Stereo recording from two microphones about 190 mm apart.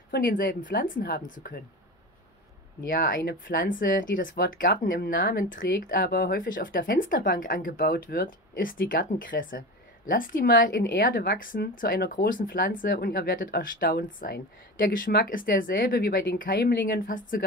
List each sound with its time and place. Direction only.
0.1 s speech: 50° left (ahead or behind)
2.9 s speech: 50° left (ahead or behind)